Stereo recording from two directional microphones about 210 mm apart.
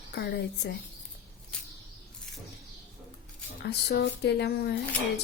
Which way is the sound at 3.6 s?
50° left (ahead or behind).